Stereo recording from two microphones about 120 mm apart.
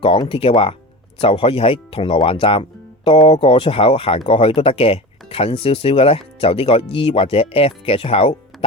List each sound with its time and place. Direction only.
0.0 s speech: 50° left (ahead or behind)